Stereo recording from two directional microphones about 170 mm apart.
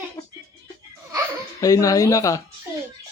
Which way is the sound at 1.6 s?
20° left (ahead or behind).